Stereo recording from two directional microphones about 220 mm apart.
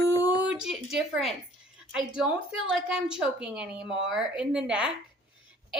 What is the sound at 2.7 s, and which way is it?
A woman's voice, 5° right (ahead or behind).